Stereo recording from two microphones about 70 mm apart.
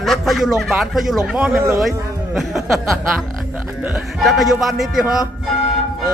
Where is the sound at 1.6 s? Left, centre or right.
Right.